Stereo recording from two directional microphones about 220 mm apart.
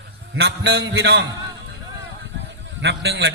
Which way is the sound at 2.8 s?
50° right (ahead or behind).